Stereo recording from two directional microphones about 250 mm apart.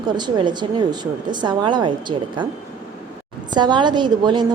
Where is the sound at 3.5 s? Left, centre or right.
Centre.